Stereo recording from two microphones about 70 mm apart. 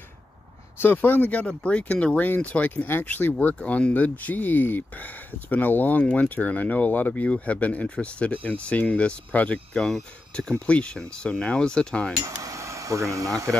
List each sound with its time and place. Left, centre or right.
0.7 s speech: left
9.8 s speech: centre
10.5 s speech: centre
12.3 s speech: right